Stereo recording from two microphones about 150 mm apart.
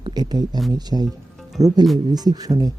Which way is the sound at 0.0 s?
30° right (ahead or behind).